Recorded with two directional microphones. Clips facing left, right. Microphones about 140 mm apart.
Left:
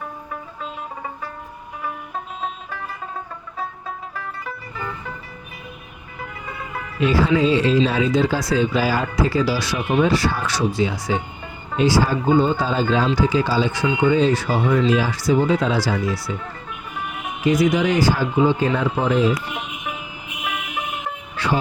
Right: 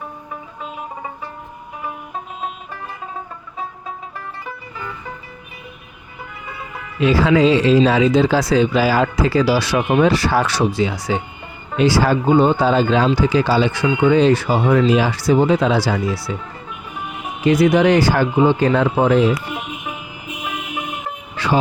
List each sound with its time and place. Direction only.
7.0 s speech: 90° right; by 16.3 s 70° right (ahead or behind)
17.4 s speech: 65° right (ahead or behind)
21.3 s music: 90° right